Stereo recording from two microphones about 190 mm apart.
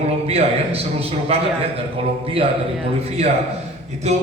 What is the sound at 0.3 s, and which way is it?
A man's voice, 30° right (ahead or behind).